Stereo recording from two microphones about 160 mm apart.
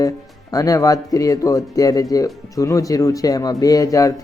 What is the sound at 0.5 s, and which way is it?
Speech, 20° left (ahead or behind).